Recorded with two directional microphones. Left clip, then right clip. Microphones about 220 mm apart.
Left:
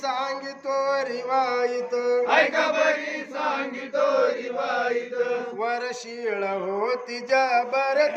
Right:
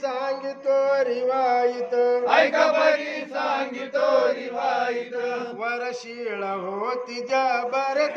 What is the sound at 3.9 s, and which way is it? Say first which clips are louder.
Chant: right 1 dB; 10° right (ahead or behind).